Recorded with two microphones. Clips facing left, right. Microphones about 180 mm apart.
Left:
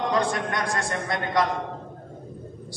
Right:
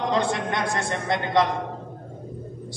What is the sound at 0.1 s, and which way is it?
A man's voice, 25° right (ahead or behind).